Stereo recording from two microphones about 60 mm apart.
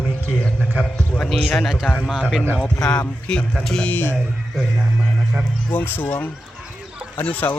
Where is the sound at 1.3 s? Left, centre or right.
Centre.